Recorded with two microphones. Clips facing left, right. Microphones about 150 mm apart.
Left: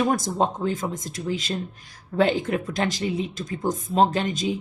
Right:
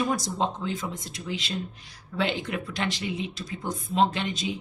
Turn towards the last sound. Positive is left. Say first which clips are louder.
# left 5 dB
turn(degrees=45)  # may be behind; listen again after turning